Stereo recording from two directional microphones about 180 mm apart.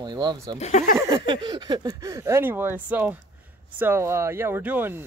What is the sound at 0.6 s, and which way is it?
Speech, 40° left (ahead or behind).